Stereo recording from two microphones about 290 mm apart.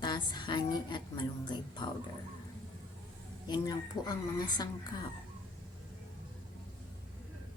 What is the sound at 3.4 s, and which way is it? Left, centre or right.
A woman's voice, centre.